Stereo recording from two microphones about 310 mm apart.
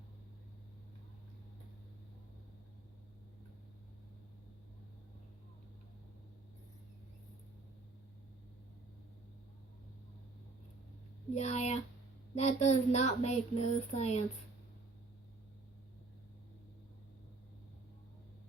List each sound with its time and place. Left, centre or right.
11.3 s speech: left